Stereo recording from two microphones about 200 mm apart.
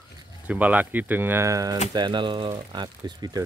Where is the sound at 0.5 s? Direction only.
5° right (ahead or behind).